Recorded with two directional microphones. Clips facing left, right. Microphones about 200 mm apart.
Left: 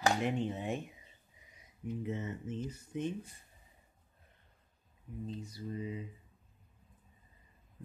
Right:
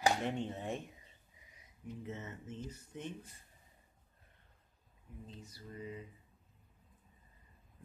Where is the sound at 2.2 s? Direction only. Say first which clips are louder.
Left 6 dB; 25° left (ahead or behind).